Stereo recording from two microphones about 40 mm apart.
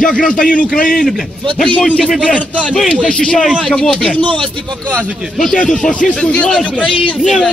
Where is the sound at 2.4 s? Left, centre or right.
Left.